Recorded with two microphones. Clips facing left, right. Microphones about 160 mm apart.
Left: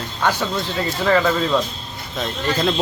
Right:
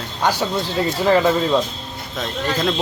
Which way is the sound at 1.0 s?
20° right (ahead or behind).